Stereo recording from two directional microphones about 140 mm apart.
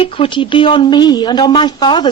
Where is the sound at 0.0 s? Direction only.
40° left (ahead or behind).